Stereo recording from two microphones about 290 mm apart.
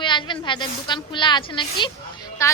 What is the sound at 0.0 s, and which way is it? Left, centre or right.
A woman's voice, centre.